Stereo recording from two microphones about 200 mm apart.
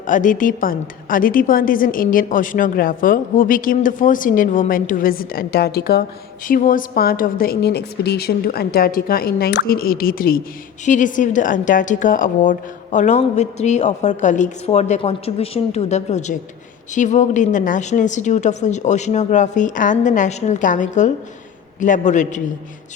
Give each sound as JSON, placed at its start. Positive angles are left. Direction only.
{"t": 0.1, "sound": "a woman's voice", "side_deg": 40}